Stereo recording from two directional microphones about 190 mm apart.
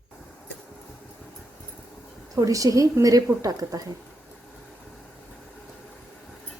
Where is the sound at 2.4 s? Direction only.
20° right (ahead or behind).